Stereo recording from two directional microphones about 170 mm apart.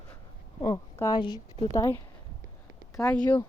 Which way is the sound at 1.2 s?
25° left (ahead or behind).